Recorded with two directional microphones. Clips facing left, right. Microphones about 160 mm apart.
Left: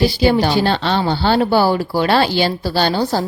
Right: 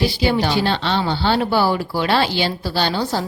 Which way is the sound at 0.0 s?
40° left (ahead or behind).